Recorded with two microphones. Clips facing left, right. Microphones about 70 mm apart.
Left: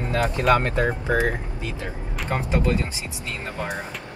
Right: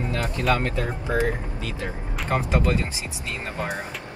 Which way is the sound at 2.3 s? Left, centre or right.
Right.